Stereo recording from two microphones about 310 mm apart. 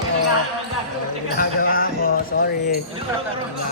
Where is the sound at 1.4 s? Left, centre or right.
Left.